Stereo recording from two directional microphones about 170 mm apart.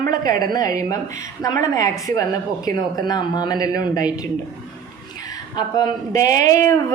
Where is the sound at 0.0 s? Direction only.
20° left (ahead or behind).